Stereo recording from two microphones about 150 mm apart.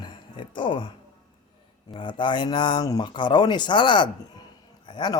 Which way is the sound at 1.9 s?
30° left (ahead or behind).